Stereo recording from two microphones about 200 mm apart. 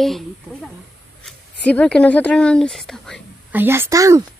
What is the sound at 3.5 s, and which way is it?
Speech, 10° right (ahead or behind).